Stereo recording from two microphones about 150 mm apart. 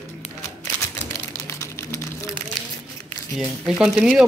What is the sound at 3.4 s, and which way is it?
Speech, 5° right (ahead or behind).